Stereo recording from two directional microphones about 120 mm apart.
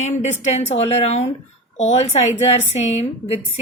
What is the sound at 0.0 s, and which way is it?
A woman's voice, 75° left (ahead or behind).